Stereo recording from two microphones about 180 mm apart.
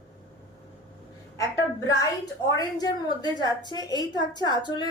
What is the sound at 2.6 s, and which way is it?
A woman's voice, 20° left (ahead or behind).